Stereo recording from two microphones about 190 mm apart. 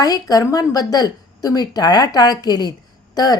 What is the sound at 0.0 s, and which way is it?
A woman's voice, 20° left (ahead or behind).